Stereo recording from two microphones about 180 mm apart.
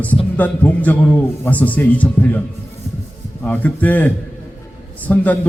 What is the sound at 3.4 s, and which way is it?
A man's voice, 10° left (ahead or behind).